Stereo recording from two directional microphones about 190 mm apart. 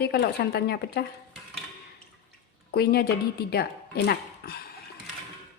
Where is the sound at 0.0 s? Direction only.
60° left (ahead or behind).